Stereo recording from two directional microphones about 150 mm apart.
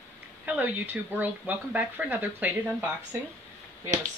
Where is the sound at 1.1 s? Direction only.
10° right (ahead or behind).